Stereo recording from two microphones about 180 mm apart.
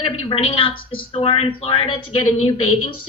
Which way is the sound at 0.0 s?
30° left (ahead or behind).